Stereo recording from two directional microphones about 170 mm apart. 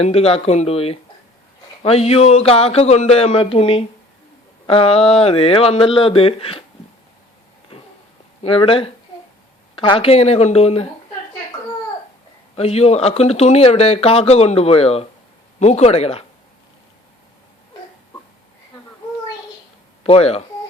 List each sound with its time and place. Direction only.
0.0 s speech: 35° left (ahead or behind)
7.7 s a sound: 35° left (ahead or behind)
8.4 s speech: 30° left (ahead or behind)
12.5 s speech: 35° left (ahead or behind)
20.1 s speech: 35° left (ahead or behind)